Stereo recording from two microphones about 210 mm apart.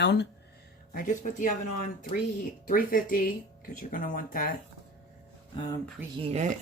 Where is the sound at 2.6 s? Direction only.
40° left (ahead or behind).